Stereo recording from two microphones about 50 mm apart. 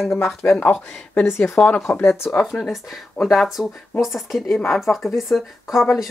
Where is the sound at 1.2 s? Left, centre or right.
Left.